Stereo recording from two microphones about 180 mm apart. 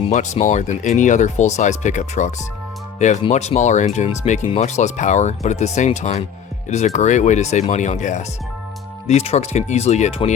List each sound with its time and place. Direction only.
0.1 s speech: 40° left (ahead or behind)